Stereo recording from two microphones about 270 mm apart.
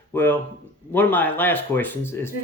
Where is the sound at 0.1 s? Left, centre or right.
Centre.